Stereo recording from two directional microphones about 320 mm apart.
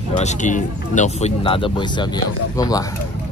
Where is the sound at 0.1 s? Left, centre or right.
Left.